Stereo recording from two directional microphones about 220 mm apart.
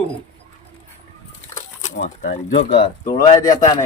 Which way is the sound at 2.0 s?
35° left (ahead or behind).